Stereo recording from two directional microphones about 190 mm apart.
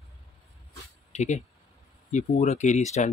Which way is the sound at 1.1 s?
40° left (ahead or behind).